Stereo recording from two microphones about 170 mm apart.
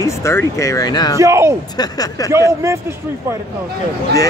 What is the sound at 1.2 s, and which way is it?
Speech, 15° right (ahead or behind).